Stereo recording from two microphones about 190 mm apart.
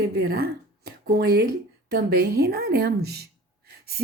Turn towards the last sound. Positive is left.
turn(degrees=-60)  # may be behind; listen again after turning